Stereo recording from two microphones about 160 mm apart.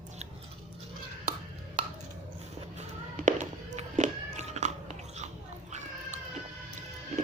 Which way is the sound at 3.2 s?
50° right (ahead or behind).